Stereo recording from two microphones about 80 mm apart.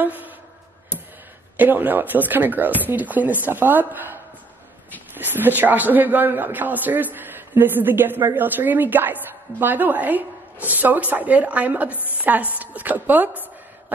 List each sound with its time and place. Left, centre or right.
0.0 s a man's voice: right
1.6 s a man's voice: right